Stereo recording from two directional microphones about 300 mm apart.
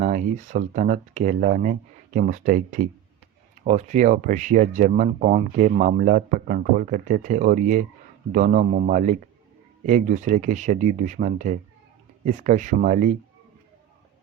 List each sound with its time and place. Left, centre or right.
0.0 s speech: right